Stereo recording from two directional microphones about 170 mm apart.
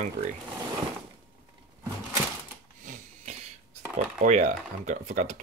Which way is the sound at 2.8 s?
45° right (ahead or behind).